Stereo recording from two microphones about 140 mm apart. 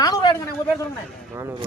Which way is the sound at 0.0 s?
30° left (ahead or behind).